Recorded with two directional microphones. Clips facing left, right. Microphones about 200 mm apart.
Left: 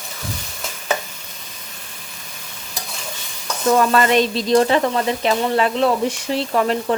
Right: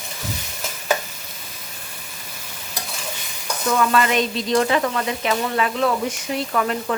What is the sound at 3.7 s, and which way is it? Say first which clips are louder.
Sizzle: left 3 dB; 40° left (ahead or behind).